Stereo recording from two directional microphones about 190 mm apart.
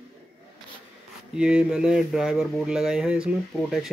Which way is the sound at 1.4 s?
5° right (ahead or behind).